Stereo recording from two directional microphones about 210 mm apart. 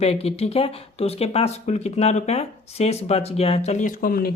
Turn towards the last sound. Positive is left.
turn(degrees=45)  # may be behind; listen again after turning